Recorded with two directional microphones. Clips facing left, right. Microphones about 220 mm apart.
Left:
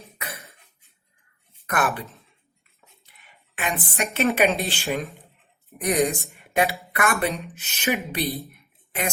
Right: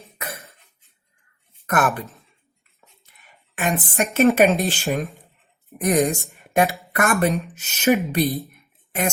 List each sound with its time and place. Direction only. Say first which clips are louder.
1.6 s speech: right 4 dB; 45° right (ahead or behind)
3.5 s speech: right 5 dB; 45° right (ahead or behind)
6.4 s a sound: right 3 dB; 50° right (ahead or behind)
6.9 s speech: right 6 dB; 45° right (ahead or behind)